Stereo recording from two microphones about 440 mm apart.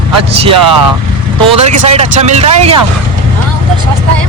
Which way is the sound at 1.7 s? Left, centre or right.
Centre.